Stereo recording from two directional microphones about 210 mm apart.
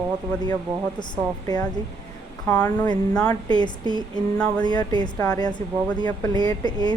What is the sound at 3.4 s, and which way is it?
A woman's voice, 20° left (ahead or behind).